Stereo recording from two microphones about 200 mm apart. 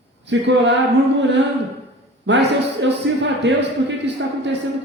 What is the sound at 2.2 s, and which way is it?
A man's voice, 60° right (ahead or behind).